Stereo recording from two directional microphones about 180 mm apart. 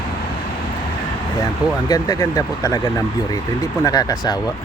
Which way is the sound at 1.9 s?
20° left (ahead or behind).